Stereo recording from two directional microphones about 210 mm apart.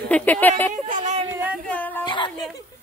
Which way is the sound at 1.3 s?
5° right (ahead or behind).